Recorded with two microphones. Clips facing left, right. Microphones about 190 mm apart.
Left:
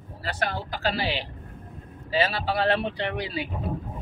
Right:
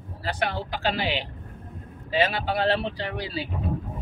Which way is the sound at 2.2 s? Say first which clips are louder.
Right 1 dB; 20° right (ahead or behind).